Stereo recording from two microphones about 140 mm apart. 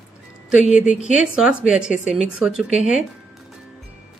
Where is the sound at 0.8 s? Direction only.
60° left (ahead or behind).